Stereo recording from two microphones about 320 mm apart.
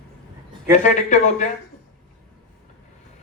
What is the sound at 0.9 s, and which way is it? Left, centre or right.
Speech, left.